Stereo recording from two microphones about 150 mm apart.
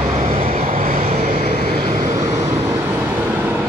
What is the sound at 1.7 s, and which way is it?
Vehicle, 60° right (ahead or behind).